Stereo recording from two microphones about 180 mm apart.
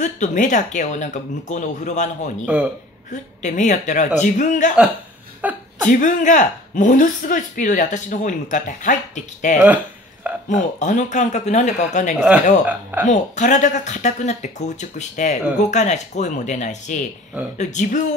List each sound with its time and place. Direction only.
0.0 s a woman's voice: 45° left (ahead or behind)
2.4 s speech: 10° right (ahead or behind)
3.1 s a woman's voice: 45° left (ahead or behind)
5.4 s speech: 10° right (ahead or behind)
5.9 s a woman's voice: 45° left (ahead or behind)